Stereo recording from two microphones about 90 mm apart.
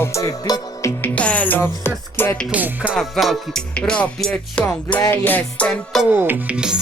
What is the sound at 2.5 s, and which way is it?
Music, 15° right (ahead or behind).